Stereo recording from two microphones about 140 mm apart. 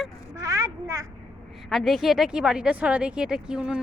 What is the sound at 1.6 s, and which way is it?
Speech, centre (ahead or behind).